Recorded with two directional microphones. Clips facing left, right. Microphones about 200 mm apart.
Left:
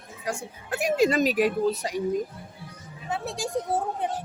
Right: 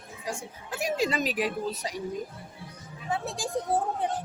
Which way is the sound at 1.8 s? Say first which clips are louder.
Left 5 dB; 55° left (ahead or behind).